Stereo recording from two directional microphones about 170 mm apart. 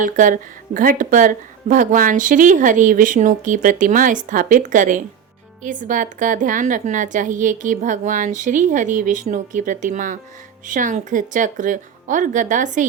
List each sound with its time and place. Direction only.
0.0 s speech: 50° right (ahead or behind)